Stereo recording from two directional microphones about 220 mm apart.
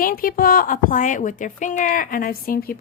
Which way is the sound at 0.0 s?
40° left (ahead or behind).